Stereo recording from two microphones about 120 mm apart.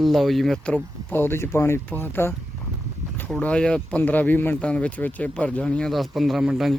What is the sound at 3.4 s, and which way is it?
Speech, 10° left (ahead or behind).